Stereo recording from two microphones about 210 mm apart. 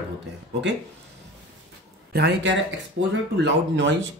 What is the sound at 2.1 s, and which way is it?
Speech, 50° right (ahead or behind).